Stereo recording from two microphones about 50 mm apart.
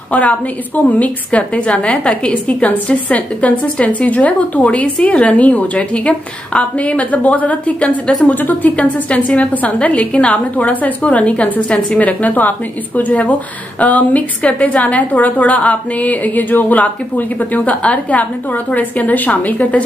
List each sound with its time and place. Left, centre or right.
0.1 s a woman's voice: left
8.4 s a woman's voice: left
8.7 s a woman's voice: left